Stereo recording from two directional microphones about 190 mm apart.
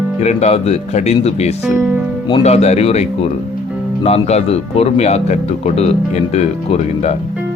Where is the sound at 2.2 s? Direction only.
30° left (ahead or behind).